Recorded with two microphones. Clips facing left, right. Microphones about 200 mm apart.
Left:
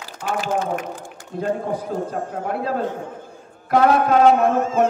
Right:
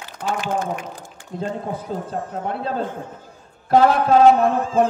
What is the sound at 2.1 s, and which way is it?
A man's voice, 25° right (ahead or behind).